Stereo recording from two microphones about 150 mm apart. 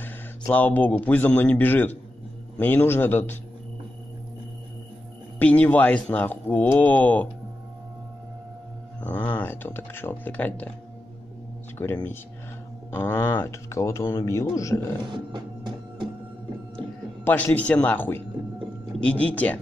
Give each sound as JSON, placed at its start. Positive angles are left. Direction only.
{"t": 0.5, "sound": "speech", "side_deg": 10}
{"t": 5.4, "sound": "speech", "side_deg": 10}
{"t": 9.0, "sound": "speech", "side_deg": 10}
{"t": 11.8, "sound": "speech", "side_deg": 15}
{"t": 15.0, "sound": "music", "side_deg": -30}
{"t": 16.7, "sound": "a sound", "side_deg": 10}
{"t": 17.5, "sound": "speech", "side_deg": 10}
{"t": 19.2, "sound": "speech", "side_deg": 10}